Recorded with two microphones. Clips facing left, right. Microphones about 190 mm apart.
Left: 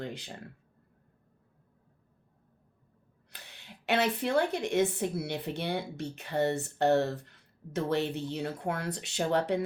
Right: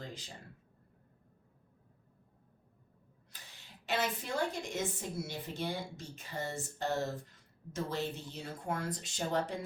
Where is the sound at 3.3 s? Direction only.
65° left (ahead or behind).